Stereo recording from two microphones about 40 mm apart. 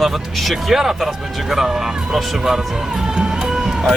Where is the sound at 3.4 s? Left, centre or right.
Centre.